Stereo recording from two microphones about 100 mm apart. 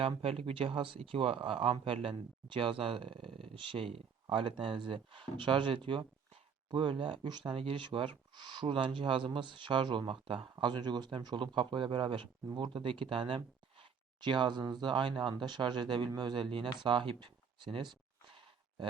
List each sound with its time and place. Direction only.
0.0 s speech: 75° right (ahead or behind); by 7.5 s 50° right (ahead or behind)
7.5 s speech: 65° right (ahead or behind)
10.6 s speech: 50° right (ahead or behind)
18.3 s a sound: 55° right (ahead or behind)